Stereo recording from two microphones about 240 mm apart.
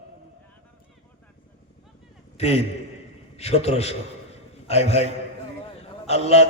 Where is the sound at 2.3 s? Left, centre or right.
Left.